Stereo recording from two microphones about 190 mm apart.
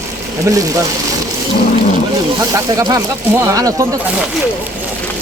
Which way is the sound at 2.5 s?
20° right (ahead or behind).